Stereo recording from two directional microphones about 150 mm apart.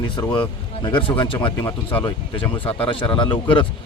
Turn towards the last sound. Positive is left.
turn(degrees=30)  # may be behind; listen again after turning